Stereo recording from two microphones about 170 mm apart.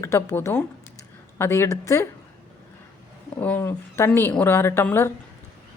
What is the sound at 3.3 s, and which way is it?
A woman's voice, 10° left (ahead or behind).